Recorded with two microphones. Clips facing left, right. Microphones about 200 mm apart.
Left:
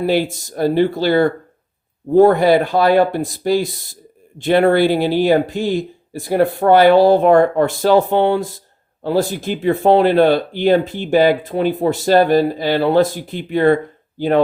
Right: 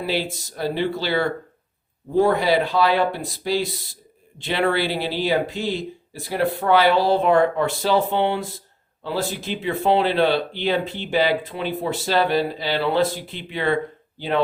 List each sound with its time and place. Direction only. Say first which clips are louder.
0.0 s speech: left 8 dB; 50° left (ahead or behind)